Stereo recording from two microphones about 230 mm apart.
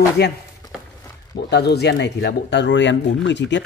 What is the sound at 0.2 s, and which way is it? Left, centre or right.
Speech, left.